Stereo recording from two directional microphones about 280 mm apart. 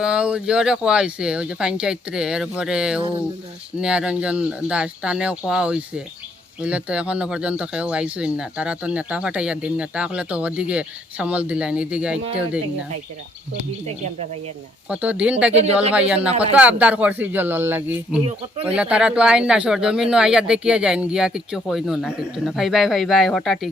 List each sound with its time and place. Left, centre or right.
0.0 s speech: centre
14.8 s speech: centre
15.6 s speech: right
15.9 s speech: centre